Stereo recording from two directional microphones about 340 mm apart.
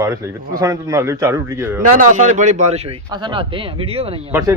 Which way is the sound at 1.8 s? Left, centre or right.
Right.